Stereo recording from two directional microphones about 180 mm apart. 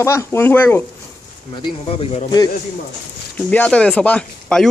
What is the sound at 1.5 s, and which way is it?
Speech, 30° left (ahead or behind).